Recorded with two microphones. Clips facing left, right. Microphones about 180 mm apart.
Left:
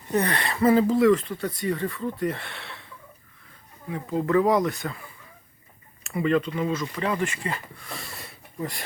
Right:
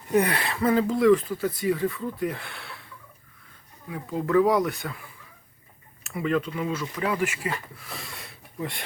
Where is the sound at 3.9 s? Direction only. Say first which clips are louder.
Left 1 dB; centre (ahead or behind).